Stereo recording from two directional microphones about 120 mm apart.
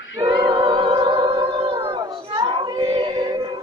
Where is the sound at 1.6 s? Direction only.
50° right (ahead or behind).